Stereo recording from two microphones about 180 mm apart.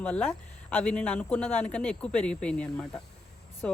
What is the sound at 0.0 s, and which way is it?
Speech, 10° left (ahead or behind).